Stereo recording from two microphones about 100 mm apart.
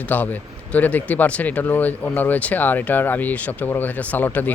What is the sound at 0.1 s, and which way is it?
Speech, 20° left (ahead or behind).